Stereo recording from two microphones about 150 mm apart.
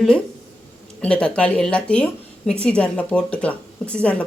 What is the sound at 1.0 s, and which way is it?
Speech, 5° left (ahead or behind).